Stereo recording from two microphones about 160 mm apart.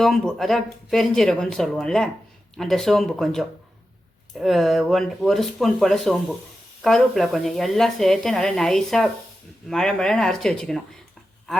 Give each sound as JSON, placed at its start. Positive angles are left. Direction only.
{"t": 0.0, "sound": "a woman's voice", "side_deg": 0}